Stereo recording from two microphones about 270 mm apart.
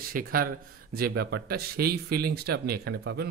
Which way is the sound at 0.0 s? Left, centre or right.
Right.